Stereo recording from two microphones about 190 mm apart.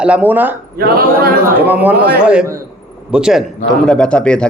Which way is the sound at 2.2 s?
5° right (ahead or behind).